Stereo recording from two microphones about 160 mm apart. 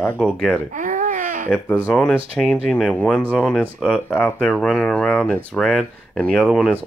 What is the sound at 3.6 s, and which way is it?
Speech, 5° right (ahead or behind).